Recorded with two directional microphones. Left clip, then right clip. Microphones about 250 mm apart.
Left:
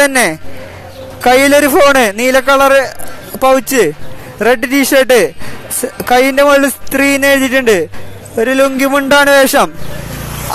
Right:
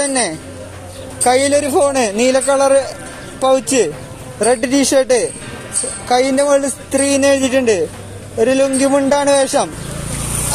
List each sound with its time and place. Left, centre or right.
0.0 s a man's voice: left